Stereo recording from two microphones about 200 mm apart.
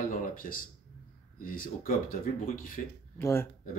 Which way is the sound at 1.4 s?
45° left (ahead or behind).